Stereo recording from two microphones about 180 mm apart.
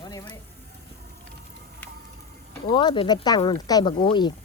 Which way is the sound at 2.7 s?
25° left (ahead or behind).